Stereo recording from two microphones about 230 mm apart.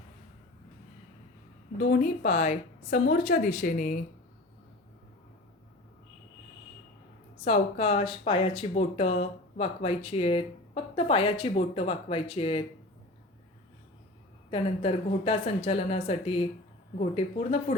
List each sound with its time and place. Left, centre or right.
1.8 s a woman's voice: left
7.4 s speech: left
14.5 s speech: left